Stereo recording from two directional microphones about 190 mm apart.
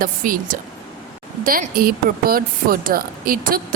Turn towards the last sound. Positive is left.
turn(degrees=-50)  # may be behind; listen again after turning